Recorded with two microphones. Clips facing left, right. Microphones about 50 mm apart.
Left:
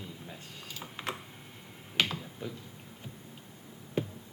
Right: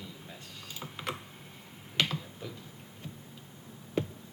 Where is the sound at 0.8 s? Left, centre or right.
Centre.